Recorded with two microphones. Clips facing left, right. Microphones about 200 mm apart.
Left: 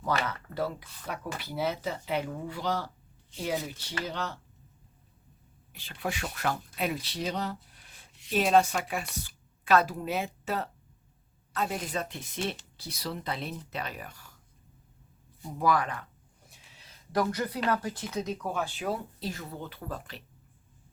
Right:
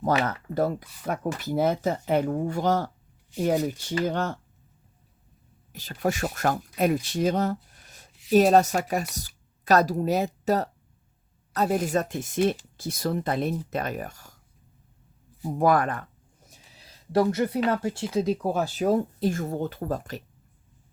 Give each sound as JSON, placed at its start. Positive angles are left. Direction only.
{"t": 0.1, "sound": "speech", "side_deg": -45}
{"t": 5.7, "sound": "speech", "side_deg": -40}
{"t": 15.4, "sound": "speech", "side_deg": -50}
{"t": 16.5, "sound": "a sound", "side_deg": -35}
{"t": 17.7, "sound": "speech", "side_deg": -25}